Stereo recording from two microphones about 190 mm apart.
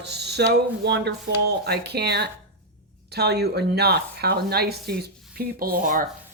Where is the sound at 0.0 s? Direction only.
60° right (ahead or behind).